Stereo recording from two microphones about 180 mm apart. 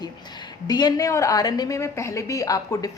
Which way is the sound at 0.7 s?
20° left (ahead or behind).